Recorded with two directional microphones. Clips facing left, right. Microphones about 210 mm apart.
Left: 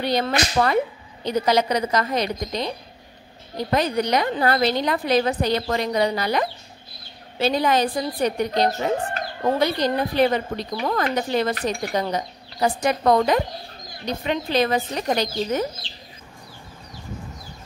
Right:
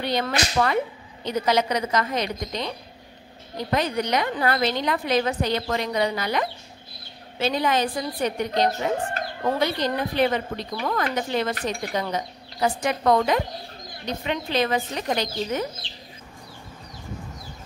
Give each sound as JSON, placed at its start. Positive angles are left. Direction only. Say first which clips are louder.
{"t": 0.0, "sound": "a woman's voice", "louder": "left 3 dB", "side_deg": 35}